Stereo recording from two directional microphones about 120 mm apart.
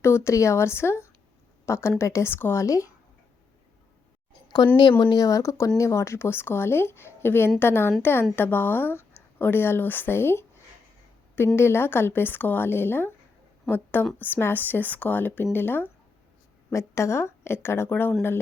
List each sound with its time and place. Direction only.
0.0 s speech: 20° left (ahead or behind)
4.8 s a woman's voice: 35° left (ahead or behind); by 10.4 s 20° left (ahead or behind)
11.5 s a woman's voice: 20° left (ahead or behind)